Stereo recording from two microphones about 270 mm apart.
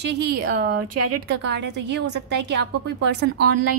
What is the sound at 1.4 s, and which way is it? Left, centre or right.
A woman's voice, right.